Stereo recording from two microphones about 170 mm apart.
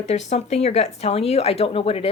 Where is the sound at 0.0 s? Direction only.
40° left (ahead or behind).